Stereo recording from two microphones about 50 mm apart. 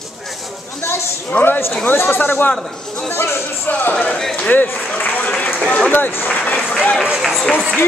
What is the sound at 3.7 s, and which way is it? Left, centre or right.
Speech, left.